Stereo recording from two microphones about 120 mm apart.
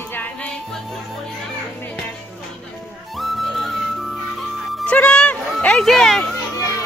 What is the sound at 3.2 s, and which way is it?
Music, centre (ahead or behind).